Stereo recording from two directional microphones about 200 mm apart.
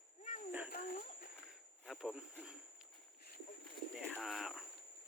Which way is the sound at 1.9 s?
Centre (ahead or behind).